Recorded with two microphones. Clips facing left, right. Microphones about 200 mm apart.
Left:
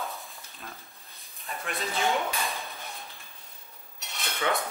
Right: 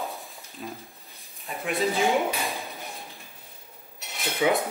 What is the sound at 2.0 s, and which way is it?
Drawer open or close, 15° right (ahead or behind).